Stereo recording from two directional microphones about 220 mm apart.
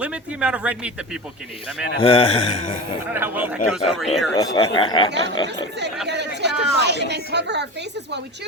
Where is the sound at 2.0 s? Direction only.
25° left (ahead or behind).